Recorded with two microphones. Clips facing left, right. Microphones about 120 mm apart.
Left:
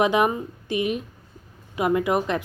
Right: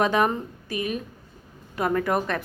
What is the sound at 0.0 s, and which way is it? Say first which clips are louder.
Speech: left 2 dB; 15° left (ahead or behind).